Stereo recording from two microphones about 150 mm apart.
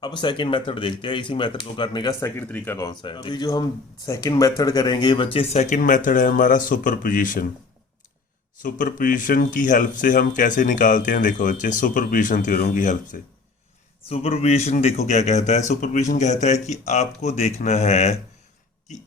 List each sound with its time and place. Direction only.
0.0 s speech: 30° left (ahead or behind)
2.2 s speech: 10° left (ahead or behind)
2.8 s speech: 30° left (ahead or behind); by 7.4 s 65° left (ahead or behind)
8.6 s speech: 65° left (ahead or behind)
14.1 s a man's voice: 40° left (ahead or behind)